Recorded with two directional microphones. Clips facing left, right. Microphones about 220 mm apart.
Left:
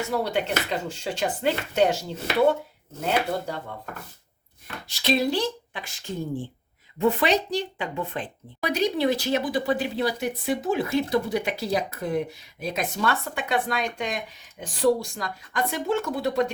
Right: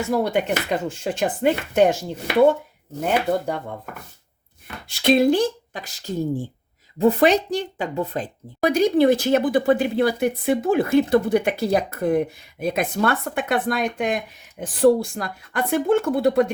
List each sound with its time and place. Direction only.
0.2 s speech: 50° right (ahead or behind)
3.0 s speech: 55° right (ahead or behind)
4.9 s speech: 55° right (ahead or behind)